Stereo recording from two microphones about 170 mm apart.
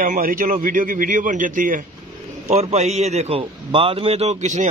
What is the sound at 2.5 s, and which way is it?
A man's voice, 40° right (ahead or behind).